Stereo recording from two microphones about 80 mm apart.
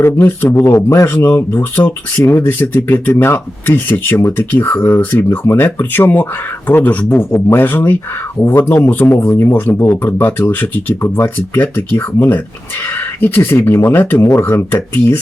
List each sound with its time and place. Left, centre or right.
0.0 s speech: left